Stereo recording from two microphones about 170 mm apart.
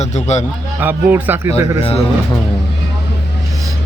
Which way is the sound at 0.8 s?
10° right (ahead or behind).